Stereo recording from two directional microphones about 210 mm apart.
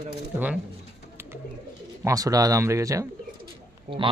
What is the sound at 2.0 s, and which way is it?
Speech, 15° right (ahead or behind).